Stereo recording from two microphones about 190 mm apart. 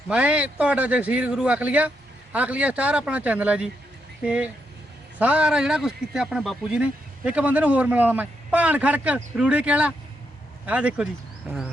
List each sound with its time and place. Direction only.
0.1 s a man's voice: 5° right (ahead or behind)